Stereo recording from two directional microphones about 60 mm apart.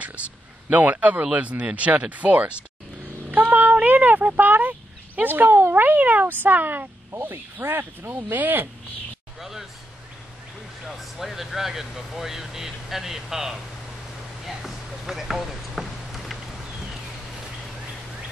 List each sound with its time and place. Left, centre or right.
0.7 s speech: right
9.4 s speech: centre
10.9 s speech: centre
14.4 s a sound: centre